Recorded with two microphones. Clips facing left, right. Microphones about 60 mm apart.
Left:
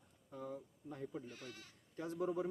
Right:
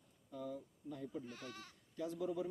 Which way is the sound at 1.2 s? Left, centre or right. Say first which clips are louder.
Right 2 dB; right.